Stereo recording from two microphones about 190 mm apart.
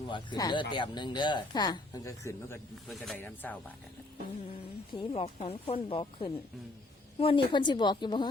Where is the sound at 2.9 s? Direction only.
Centre (ahead or behind).